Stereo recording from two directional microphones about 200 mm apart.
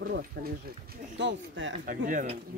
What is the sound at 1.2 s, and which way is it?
Speech, 65° right (ahead or behind).